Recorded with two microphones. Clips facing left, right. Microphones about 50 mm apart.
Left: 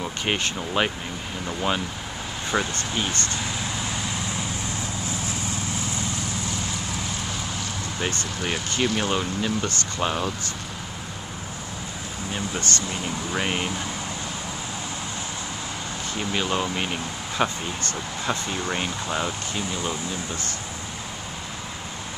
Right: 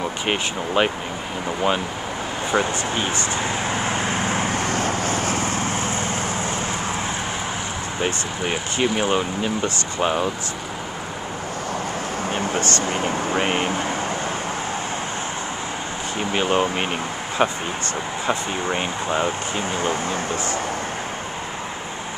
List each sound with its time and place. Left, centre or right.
0.0 s speech: centre
2.5 s speech: centre
3.3 s vehicle: right
8.4 s speech: centre
12.3 s a sound: right
12.7 s speech: right
13.4 s speech: right
16.2 s speech: right